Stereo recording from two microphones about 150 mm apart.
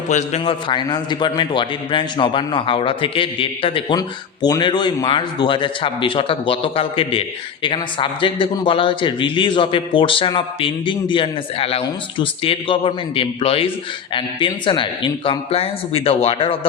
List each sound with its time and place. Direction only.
0.1 s a man's voice: 50° left (ahead or behind)
0.4 s speech: 30° left (ahead or behind)